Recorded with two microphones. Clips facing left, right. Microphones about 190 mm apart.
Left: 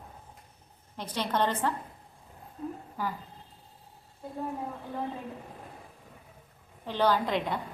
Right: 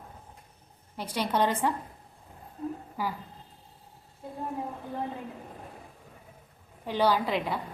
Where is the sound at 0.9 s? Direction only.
10° right (ahead or behind).